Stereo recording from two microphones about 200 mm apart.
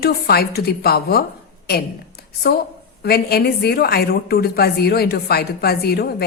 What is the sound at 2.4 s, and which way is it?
Speech, 50° left (ahead or behind).